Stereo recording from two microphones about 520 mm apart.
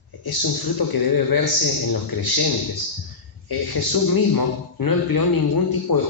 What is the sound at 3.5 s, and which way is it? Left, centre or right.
A man's voice, left.